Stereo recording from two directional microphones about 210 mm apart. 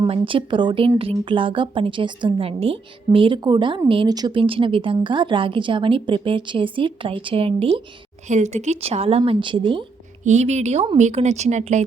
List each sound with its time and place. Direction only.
0.0 s a woman's voice: 25° right (ahead or behind)